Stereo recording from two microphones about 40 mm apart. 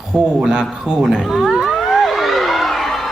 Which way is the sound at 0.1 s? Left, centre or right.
Right.